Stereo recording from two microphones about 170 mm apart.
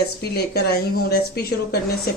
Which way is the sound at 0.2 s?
70° left (ahead or behind).